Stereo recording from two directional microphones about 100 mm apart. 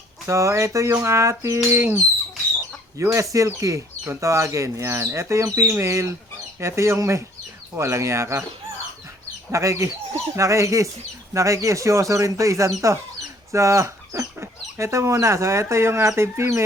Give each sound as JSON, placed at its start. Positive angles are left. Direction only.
{"t": 0.3, "sound": "speech", "side_deg": -30}
{"t": 3.0, "sound": "speech", "side_deg": -30}
{"t": 9.5, "sound": "speech", "side_deg": -30}